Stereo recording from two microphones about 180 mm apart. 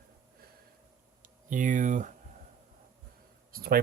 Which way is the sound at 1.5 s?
45° right (ahead or behind).